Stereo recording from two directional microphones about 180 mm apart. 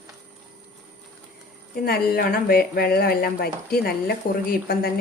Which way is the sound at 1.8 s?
60° left (ahead or behind).